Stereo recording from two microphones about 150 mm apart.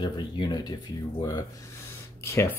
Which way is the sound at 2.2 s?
20° left (ahead or behind).